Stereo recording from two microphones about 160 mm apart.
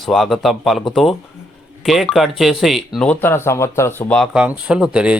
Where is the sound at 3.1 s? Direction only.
15° left (ahead or behind).